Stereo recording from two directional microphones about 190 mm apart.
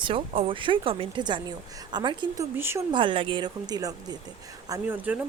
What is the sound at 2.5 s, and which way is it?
Speech, 10° right (ahead or behind).